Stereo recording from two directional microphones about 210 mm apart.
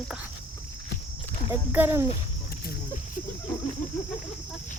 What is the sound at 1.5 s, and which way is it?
Speech, 10° right (ahead or behind).